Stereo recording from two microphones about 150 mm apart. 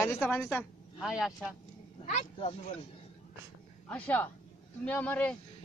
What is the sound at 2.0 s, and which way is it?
Speech, 45° left (ahead or behind).